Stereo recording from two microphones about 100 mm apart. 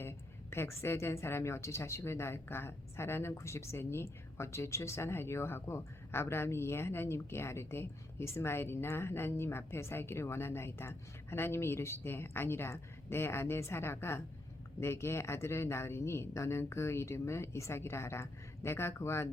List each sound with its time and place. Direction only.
0.0 s a woman's voice: 25° left (ahead or behind)